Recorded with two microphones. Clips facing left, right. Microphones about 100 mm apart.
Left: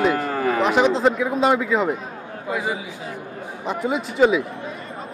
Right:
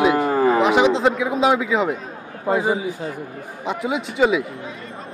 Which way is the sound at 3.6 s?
Centre (ahead or behind).